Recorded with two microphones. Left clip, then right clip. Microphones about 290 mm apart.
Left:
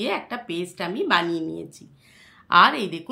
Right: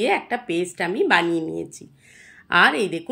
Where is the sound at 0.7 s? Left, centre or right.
Centre.